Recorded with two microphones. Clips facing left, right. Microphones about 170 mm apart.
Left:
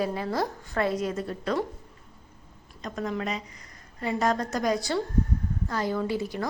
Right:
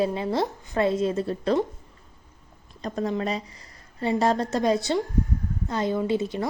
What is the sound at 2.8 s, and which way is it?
A woman's voice, 35° right (ahead or behind).